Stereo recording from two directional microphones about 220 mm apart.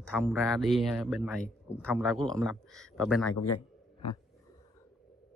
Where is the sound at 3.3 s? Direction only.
90° left.